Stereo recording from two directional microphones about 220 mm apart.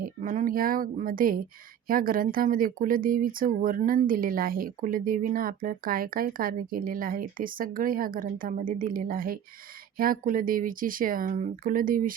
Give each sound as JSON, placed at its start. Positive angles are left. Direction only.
{"t": 0.0, "sound": "a woman's voice", "side_deg": -35}